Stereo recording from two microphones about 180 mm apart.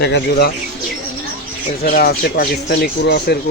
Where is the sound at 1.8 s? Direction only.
55° left (ahead or behind).